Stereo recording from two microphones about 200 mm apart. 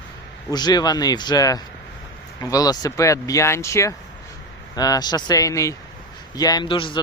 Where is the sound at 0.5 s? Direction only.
20° left (ahead or behind).